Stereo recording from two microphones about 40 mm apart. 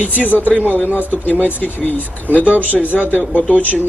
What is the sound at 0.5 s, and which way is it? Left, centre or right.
Speech, right.